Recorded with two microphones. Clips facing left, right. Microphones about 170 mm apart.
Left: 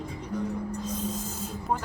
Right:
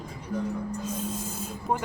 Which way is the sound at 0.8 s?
10° right (ahead or behind).